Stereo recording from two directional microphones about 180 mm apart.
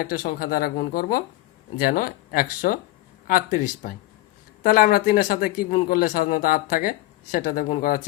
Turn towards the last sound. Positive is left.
turn(degrees=50)  # may be behind; listen again after turning